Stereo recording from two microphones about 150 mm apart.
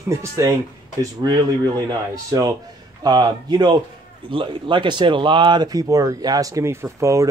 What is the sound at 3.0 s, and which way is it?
Speech, 30° right (ahead or behind).